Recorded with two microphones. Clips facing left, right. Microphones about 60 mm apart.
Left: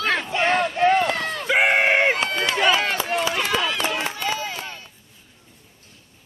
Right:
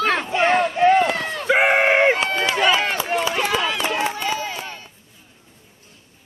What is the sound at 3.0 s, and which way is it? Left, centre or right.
Run, centre.